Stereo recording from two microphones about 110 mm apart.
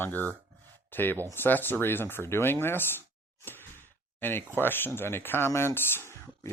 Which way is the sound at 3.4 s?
20° left (ahead or behind).